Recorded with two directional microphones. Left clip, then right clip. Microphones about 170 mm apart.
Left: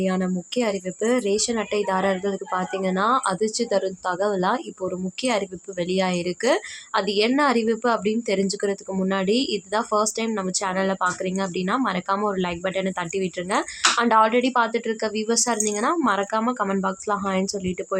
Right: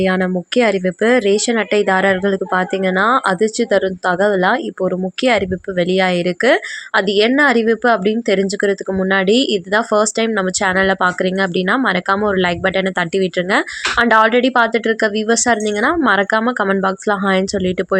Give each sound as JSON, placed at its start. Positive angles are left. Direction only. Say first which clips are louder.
{"t": 0.0, "sound": "speech", "louder": "right 9 dB", "side_deg": -20}